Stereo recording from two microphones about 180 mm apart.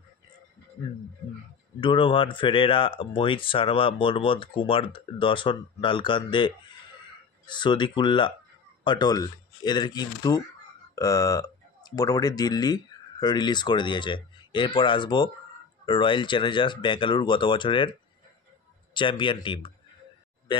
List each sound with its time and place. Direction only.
1.8 s speech: 30° left (ahead or behind)
18.9 s speech: 25° left (ahead or behind)